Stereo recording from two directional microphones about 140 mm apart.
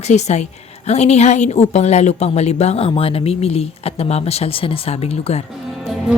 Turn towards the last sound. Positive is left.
turn(degrees=0)  # may be behind; listen again after turning